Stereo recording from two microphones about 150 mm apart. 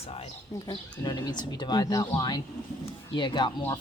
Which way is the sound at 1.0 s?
30° left (ahead or behind).